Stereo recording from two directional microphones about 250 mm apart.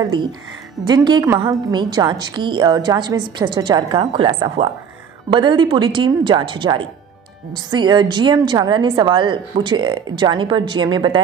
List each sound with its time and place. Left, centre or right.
0.0 s a woman's voice: centre